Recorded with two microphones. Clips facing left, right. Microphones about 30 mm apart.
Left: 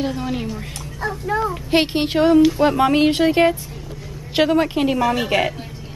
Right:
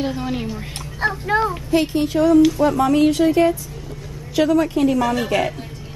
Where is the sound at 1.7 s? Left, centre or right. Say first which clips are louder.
Left 2 dB; left.